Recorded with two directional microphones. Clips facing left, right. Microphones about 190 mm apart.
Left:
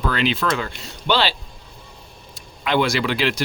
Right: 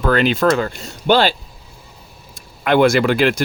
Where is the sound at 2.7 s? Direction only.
50° right (ahead or behind).